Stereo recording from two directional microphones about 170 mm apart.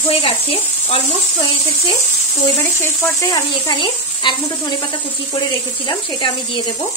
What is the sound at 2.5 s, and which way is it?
Speech, 15° left (ahead or behind).